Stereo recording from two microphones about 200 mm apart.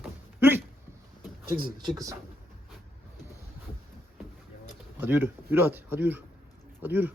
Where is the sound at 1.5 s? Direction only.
25° right (ahead or behind).